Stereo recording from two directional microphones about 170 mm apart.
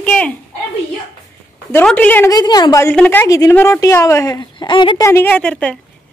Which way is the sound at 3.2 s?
20° left (ahead or behind).